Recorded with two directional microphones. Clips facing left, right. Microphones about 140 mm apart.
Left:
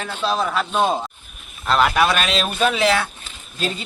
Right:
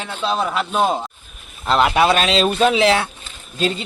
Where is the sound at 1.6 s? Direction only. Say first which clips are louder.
Right 2 dB; 20° right (ahead or behind).